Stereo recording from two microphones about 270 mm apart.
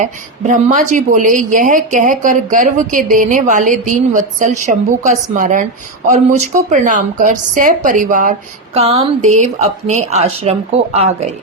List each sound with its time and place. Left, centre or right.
0.5 s a woman's voice: right